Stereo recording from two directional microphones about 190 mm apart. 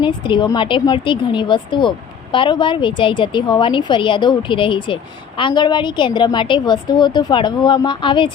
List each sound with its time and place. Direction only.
0.0 s a woman's voice: 25° left (ahead or behind)